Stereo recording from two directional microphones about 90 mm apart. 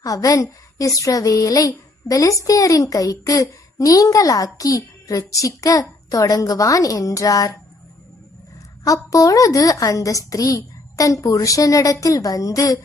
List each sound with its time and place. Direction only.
0.0 s a woman's voice: 40° left (ahead or behind)
8.8 s a woman's voice: 40° left (ahead or behind)